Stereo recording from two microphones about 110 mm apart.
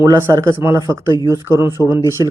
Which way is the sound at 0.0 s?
20° right (ahead or behind).